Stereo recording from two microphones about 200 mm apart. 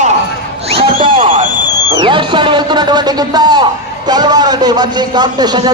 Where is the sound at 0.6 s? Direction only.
30° right (ahead or behind).